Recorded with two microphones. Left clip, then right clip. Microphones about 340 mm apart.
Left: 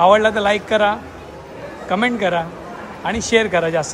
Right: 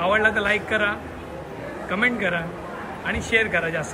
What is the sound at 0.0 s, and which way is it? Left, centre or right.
Speech, centre.